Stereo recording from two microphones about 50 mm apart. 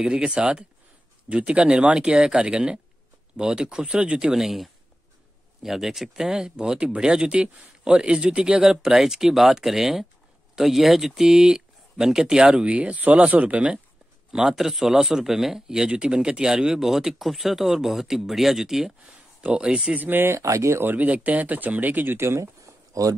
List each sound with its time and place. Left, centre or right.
0.0 s speech: centre
4.3 s speech: centre; by 13.7 s right
14.3 s speech: centre
19.4 s speech: right
19.9 s speech: right
20.3 s speech: right
20.8 s speech: right
22.1 s speech: right